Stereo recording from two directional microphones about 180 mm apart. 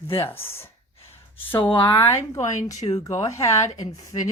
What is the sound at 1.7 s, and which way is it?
Speech, 25° left (ahead or behind).